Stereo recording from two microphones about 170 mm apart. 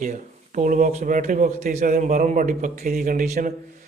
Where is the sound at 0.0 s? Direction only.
50° right (ahead or behind).